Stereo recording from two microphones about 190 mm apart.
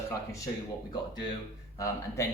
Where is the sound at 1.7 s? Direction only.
15° left (ahead or behind).